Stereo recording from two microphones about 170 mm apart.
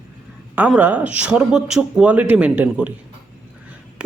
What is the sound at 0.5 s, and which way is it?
A woman's voice, 10° right (ahead or behind).